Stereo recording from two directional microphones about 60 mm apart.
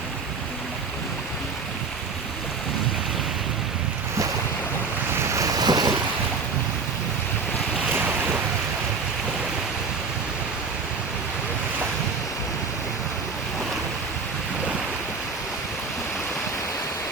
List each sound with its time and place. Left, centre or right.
5.1 s waves: right
5.4 s waves: right